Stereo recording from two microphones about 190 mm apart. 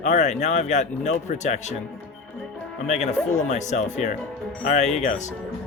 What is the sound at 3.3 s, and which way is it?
Speech, 40° left (ahead or behind).